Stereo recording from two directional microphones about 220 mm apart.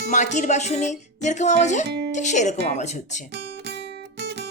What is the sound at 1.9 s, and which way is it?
Music, 50° right (ahead or behind).